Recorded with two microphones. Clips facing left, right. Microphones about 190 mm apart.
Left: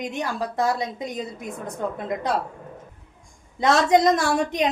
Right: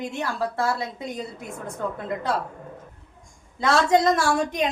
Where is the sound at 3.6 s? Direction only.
20° left (ahead or behind).